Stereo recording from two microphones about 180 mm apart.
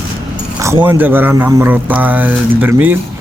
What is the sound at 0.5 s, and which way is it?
Speech, 15° right (ahead or behind).